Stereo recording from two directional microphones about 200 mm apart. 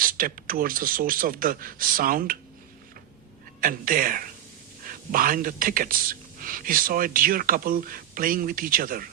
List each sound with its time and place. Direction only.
0.0 s speech: 45° right (ahead or behind)
3.6 s speech: 45° right (ahead or behind)